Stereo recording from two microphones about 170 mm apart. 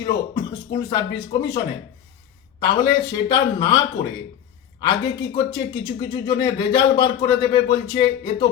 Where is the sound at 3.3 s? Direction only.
25° left (ahead or behind).